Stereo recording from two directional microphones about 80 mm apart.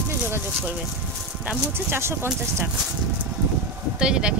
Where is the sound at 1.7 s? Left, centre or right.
Right.